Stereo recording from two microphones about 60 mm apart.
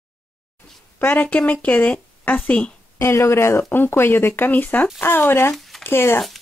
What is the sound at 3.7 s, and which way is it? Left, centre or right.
Speech, left.